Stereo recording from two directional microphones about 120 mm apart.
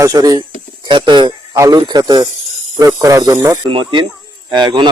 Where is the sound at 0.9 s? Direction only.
40° right (ahead or behind).